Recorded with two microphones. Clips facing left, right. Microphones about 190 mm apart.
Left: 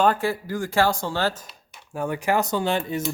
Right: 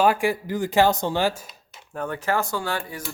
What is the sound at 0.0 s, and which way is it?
Speech, 10° right (ahead or behind).